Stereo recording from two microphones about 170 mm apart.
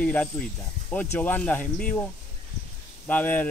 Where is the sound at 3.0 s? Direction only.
10° left (ahead or behind).